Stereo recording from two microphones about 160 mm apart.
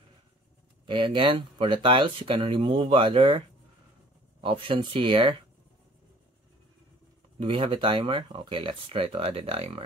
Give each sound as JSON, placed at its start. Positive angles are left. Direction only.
{"t": 0.8, "sound": "speech", "side_deg": -30}
{"t": 7.3, "sound": "speech", "side_deg": -35}